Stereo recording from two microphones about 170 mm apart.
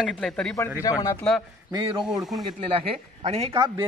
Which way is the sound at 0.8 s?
20° left (ahead or behind).